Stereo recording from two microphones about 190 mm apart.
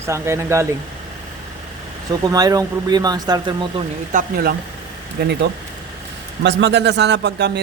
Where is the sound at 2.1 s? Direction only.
20° right (ahead or behind).